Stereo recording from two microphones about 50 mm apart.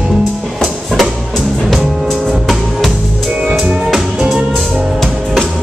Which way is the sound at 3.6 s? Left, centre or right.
Right.